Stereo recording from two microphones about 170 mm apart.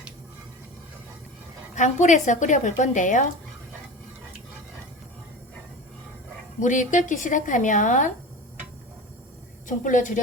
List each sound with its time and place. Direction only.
1.7 s speech: 45° left (ahead or behind)
6.6 s speech: 50° left (ahead or behind)
9.6 s speech: 50° left (ahead or behind)